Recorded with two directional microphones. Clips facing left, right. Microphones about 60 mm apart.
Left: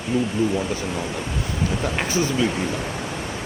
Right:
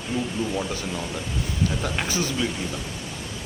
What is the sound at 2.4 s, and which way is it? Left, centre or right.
Speech, left.